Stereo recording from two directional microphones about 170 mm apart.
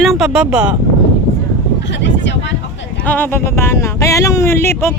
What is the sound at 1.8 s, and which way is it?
Speech, 90° left.